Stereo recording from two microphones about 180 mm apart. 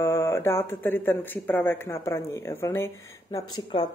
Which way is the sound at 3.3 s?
25° left (ahead or behind).